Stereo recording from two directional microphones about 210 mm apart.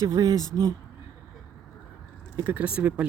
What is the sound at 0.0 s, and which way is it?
Speech, 15° right (ahead or behind).